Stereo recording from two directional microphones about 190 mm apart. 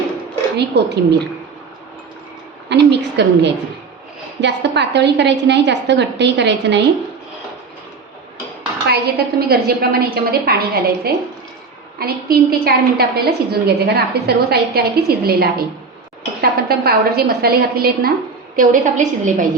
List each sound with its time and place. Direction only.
0.5 s a woman's voice: 65° right (ahead or behind)
2.6 s a woman's voice: 65° right (ahead or behind)
8.9 s a woman's voice: 55° right (ahead or behind)
18.5 s a woman's voice: 40° right (ahead or behind)